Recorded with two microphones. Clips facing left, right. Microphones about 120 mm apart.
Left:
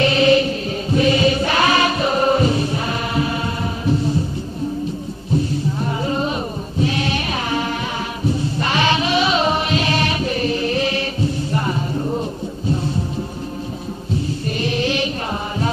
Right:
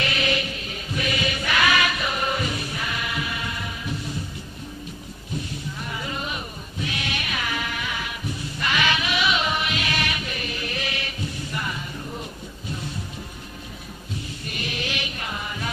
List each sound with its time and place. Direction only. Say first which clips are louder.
0.0 s music: left 12 dB; 30° left (ahead or behind)
5.3 s music: left 12 dB; 35° left (ahead or behind)
6.8 s sheep: left 10 dB; 35° left (ahead or behind)
8.2 s music: left 10 dB; 30° left (ahead or behind)
14.6 s a sound: left 11 dB; 30° left (ahead or behind)